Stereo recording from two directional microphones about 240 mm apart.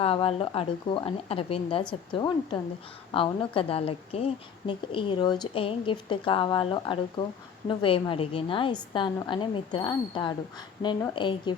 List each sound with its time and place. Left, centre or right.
0.0 s a woman's voice: left